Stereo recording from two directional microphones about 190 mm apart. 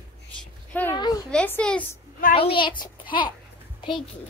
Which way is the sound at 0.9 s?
20° left (ahead or behind).